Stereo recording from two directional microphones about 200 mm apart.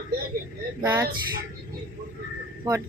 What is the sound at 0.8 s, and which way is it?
Speech, 10° right (ahead or behind).